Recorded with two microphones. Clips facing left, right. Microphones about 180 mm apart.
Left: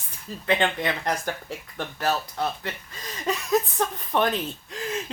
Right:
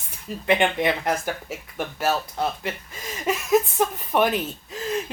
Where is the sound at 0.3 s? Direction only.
15° right (ahead or behind).